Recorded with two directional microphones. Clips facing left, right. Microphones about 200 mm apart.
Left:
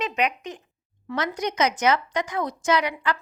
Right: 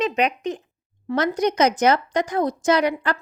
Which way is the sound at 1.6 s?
35° right (ahead or behind).